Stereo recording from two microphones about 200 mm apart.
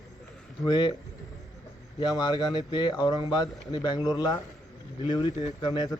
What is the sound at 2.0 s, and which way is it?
Speech, 20° left (ahead or behind).